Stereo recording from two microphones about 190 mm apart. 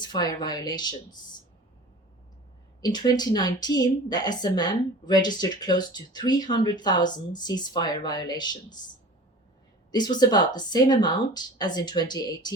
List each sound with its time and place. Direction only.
0.0 s a woman's voice: 20° left (ahead or behind)
2.8 s a woman's voice: 20° left (ahead or behind)
9.9 s a woman's voice: 20° left (ahead or behind)